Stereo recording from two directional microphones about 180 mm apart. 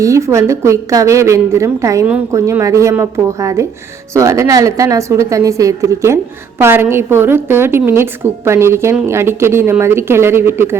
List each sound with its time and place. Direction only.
0.0 s a woman's voice: 15° right (ahead or behind)